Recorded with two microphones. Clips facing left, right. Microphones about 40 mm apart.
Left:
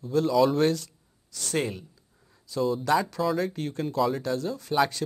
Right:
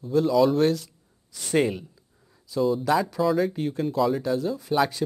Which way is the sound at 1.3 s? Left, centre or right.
Centre.